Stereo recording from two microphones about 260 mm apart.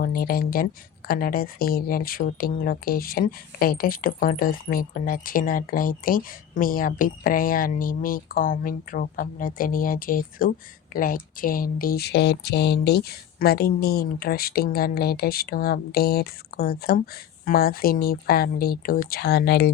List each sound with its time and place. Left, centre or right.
0.0 s speech: left